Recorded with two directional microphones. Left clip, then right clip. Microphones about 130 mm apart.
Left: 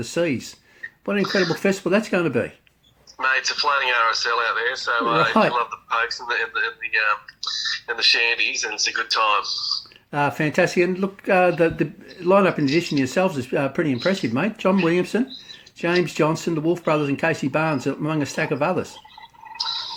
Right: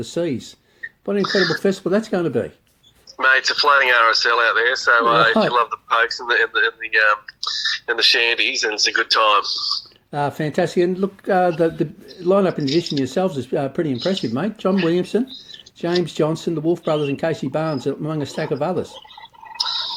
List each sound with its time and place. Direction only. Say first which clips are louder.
0.0 s speech: even; 25° right (ahead or behind)
1.2 s speech: right 3 dB; 60° right (ahead or behind)
1.6 s speech: right 1 dB; 20° right (ahead or behind)
3.2 s speech: right 5 dB; 60° right (ahead or behind)
10.1 s speech: left 1 dB; 25° right (ahead or behind)
19.5 s a sound: right 4 dB; 60° right (ahead or behind)